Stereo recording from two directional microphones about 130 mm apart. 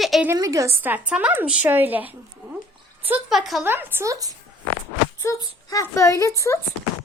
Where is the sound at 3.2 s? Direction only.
Centre (ahead or behind).